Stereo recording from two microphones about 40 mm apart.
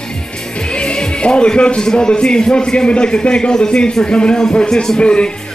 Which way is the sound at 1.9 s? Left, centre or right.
Centre.